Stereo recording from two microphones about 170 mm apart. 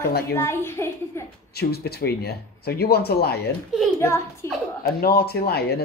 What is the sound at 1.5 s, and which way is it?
Speech, 70° left (ahead or behind).